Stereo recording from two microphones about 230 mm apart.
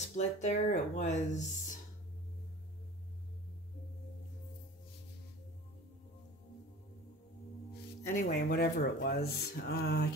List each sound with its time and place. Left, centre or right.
0.1 s speech: left
8.0 s speech: left